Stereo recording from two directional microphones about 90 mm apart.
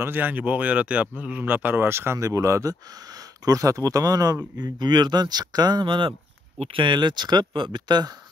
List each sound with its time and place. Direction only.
0.0 s speech: 20° right (ahead or behind); by 8.1 s 55° right (ahead or behind)